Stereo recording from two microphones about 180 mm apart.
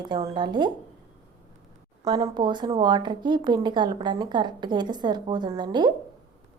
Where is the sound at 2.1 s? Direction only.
25° right (ahead or behind).